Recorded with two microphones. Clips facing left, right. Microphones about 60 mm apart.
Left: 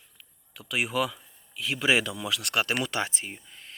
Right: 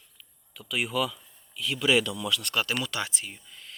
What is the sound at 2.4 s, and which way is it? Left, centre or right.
Speech, left.